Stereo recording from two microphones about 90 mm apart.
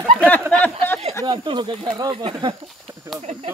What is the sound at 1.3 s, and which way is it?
Speech, 65° right (ahead or behind).